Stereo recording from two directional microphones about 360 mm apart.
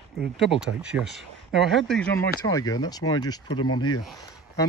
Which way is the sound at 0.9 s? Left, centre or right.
Centre.